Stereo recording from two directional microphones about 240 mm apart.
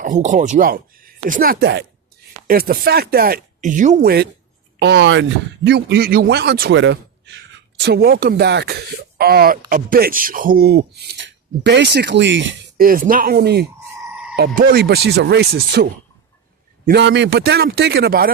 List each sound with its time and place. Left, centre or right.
0.0 s speech: right
14.1 s a sound: centre
14.3 s speech: right